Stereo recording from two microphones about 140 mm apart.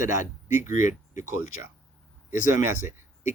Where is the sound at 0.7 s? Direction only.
65° left (ahead or behind).